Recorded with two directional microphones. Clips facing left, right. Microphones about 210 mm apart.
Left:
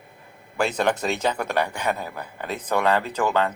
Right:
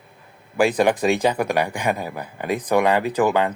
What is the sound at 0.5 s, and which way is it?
Speech, 10° right (ahead or behind).